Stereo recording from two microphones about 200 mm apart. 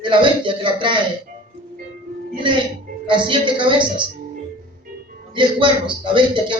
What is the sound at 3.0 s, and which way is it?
Speech, 25° right (ahead or behind).